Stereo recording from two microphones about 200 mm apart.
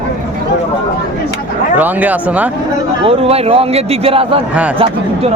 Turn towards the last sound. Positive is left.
turn(degrees=-25)  # may be behind; listen again after turning